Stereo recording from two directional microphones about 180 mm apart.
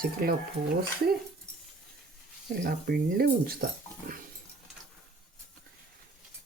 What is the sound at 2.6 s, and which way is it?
Speech, 55° right (ahead or behind).